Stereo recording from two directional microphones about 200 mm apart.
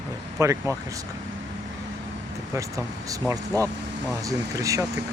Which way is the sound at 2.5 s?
15° right (ahead or behind).